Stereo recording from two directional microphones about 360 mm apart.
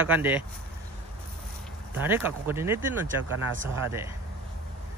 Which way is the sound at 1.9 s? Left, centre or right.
Centre.